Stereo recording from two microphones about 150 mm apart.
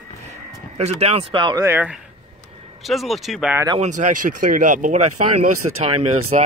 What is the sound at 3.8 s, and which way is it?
Speech, 55° right (ahead or behind).